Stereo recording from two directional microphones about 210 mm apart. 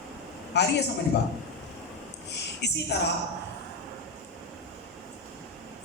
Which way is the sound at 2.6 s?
55° left (ahead or behind).